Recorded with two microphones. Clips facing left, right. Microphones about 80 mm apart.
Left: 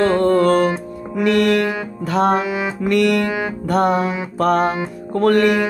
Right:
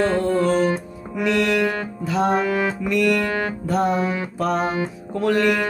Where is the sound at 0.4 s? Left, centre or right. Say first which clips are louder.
Left 4 dB; left.